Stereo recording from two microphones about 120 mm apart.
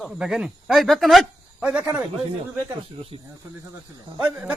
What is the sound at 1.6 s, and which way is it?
Speech, 10° right (ahead or behind).